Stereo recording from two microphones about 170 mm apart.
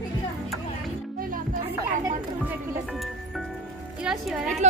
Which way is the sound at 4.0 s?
5° right (ahead or behind).